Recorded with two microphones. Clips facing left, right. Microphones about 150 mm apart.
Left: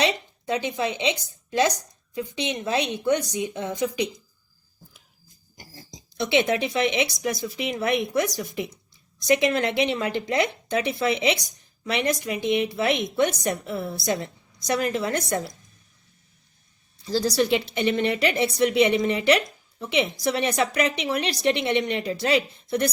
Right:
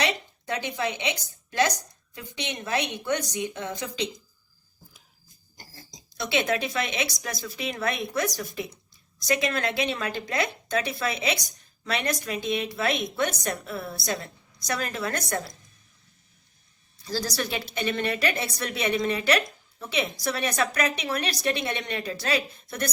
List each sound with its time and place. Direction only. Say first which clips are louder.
0.0 s speech: left 4 dB; 20° left (ahead or behind)
5.5 s speech: left 4 dB; 20° left (ahead or behind)
17.1 s speech: left 8 dB; 20° left (ahead or behind)